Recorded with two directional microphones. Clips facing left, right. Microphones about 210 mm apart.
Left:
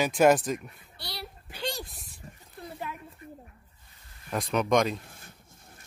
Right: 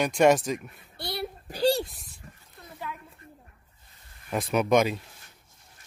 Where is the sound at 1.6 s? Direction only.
35° right (ahead or behind).